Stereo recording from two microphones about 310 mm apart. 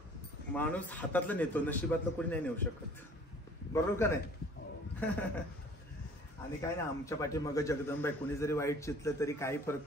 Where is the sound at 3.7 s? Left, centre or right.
Centre.